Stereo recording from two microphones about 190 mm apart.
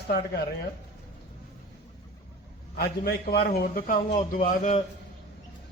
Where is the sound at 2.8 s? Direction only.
55° left (ahead or behind); by 4.8 s 40° left (ahead or behind).